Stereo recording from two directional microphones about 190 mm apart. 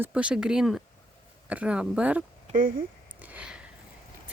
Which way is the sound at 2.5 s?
45° right (ahead or behind).